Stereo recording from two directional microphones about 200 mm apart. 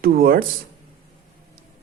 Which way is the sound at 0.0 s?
45° right (ahead or behind).